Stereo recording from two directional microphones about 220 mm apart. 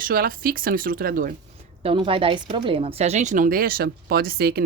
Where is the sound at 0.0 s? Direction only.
40° right (ahead or behind).